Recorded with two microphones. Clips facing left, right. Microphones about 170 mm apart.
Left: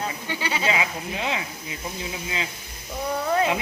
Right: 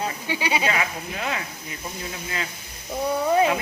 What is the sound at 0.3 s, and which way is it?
Speech, 15° right (ahead or behind).